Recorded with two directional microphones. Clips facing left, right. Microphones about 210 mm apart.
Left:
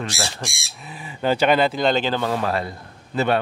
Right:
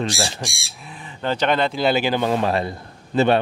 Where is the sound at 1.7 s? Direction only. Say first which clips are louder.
Right 1 dB; 5° right (ahead or behind); by 3.4 s 25° right (ahead or behind).